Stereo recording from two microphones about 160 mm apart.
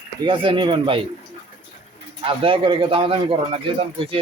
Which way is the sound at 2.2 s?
35° right (ahead or behind).